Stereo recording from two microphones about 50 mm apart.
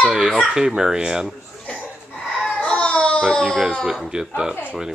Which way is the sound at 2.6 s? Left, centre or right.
Left.